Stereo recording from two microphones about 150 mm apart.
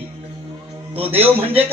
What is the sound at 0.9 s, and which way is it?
Speech, 40° right (ahead or behind).